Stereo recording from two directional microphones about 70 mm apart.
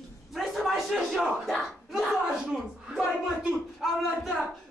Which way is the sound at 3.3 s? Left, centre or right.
Centre.